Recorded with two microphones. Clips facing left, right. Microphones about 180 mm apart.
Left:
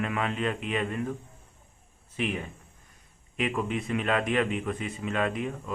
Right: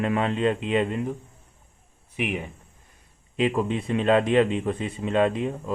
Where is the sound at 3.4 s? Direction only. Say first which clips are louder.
Right 5 dB; 30° right (ahead or behind).